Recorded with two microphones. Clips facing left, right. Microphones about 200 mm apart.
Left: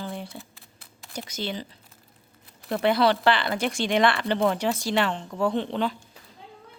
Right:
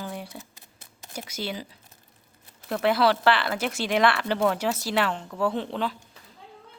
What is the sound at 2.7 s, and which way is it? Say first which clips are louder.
Speech: left 1 dB; centre (ahead or behind).